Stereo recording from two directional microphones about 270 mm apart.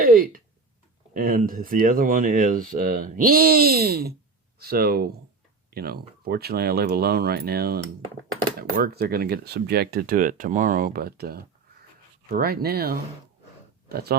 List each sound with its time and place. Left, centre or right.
0.0 s speech: right